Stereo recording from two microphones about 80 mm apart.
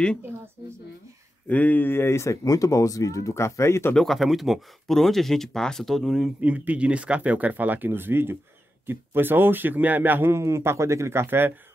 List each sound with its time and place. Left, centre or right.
1.5 s speech: centre; by 3.9 s left
3.9 s speech: centre
6.4 s a man's voice: centre